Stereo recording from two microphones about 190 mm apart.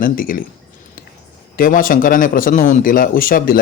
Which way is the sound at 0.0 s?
45° left (ahead or behind).